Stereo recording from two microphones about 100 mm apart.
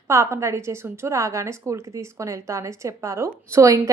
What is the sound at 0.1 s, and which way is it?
A woman's voice, 30° right (ahead or behind).